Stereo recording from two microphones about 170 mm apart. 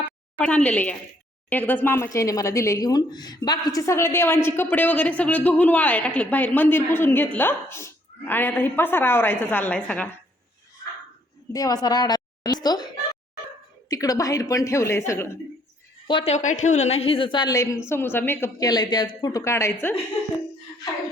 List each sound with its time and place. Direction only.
0.3 s a woman's voice: 10° left (ahead or behind)
11.5 s speech: 20° left (ahead or behind)
16.0 s speech: 30° left (ahead or behind)
16.3 s a woman's voice: 45° left (ahead or behind); by 19.7 s 15° left (ahead or behind)